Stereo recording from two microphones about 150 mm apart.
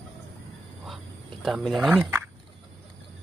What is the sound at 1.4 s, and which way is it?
Speech, centre (ahead or behind).